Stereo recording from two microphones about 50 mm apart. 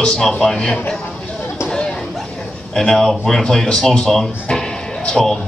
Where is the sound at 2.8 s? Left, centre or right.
Centre.